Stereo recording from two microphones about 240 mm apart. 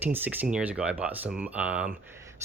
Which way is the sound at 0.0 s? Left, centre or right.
Centre.